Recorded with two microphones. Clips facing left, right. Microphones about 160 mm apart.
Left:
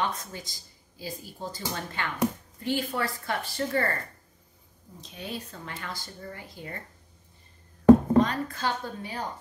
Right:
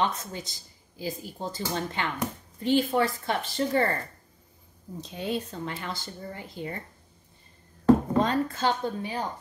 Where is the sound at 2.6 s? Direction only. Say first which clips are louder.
Right 6 dB; 25° right (ahead or behind).